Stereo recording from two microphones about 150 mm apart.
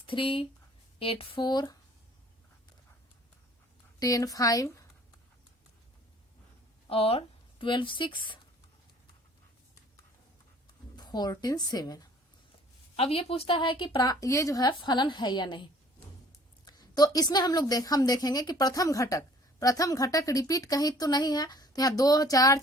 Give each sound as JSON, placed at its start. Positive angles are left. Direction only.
{"t": 0.1, "sound": "a woman's voice", "side_deg": 35}
{"t": 4.0, "sound": "a woman's voice", "side_deg": 25}
{"t": 6.8, "sound": "speech", "side_deg": 40}
{"t": 10.9, "sound": "a woman's voice", "side_deg": 30}
{"t": 13.0, "sound": "a woman's voice", "side_deg": 40}
{"t": 16.6, "sound": "a woman's voice", "side_deg": 25}